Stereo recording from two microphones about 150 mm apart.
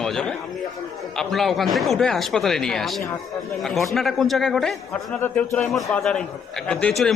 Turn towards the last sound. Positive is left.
turn(degrees=5)  # may be behind; listen again after turning